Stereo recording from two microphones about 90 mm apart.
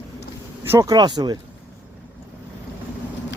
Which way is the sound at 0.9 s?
55° right (ahead or behind).